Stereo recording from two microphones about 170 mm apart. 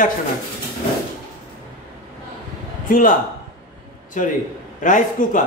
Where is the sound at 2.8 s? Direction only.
55° left (ahead or behind).